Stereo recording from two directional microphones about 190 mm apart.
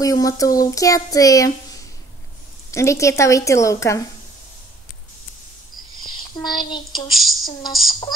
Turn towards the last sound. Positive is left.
turn(degrees=0)  # may be behind; listen again after turning